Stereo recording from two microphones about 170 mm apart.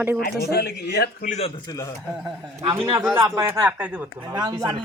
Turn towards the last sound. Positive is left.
turn(degrees=-25)  # may be behind; listen again after turning